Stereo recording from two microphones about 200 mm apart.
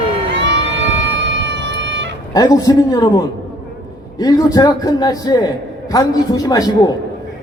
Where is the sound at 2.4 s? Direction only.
20° left (ahead or behind).